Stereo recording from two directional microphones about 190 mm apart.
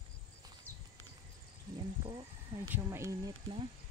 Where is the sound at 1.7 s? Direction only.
20° right (ahead or behind).